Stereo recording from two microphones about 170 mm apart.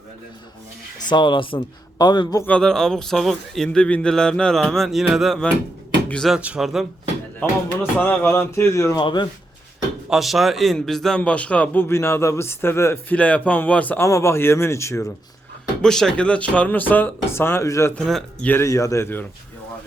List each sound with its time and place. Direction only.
1.0 s a man's voice: 25° left (ahead or behind)
2.5 s a man's voice: 5° left (ahead or behind)
7.3 s a man's voice: 10° left (ahead or behind); by 9.2 s 25° left (ahead or behind)
10.1 s a man's voice: centre (ahead or behind); by 15.0 s 15° left (ahead or behind)
15.8 s a man's voice: 5° left (ahead or behind)
17.9 s a man's voice: 5° left (ahead or behind)
18.5 s a man's voice: 15° left (ahead or behind)